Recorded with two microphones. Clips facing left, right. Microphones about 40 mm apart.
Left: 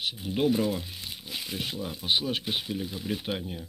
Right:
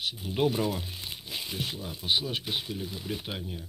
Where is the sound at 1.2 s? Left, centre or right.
Centre.